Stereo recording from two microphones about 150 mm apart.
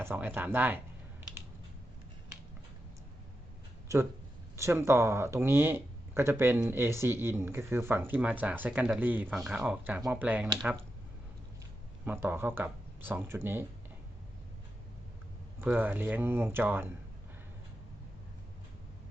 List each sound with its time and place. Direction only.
0.0 s speech: 10° right (ahead or behind)
3.9 s speech: 20° right (ahead or behind)
12.0 s speech: 15° right (ahead or behind)
15.6 s speech: 10° right (ahead or behind)